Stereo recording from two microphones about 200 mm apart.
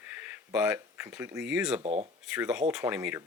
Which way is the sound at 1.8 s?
30° right (ahead or behind).